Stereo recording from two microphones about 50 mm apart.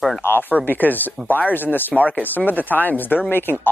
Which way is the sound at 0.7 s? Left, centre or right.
Left.